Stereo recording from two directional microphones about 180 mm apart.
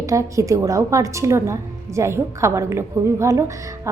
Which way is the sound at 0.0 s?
20° right (ahead or behind).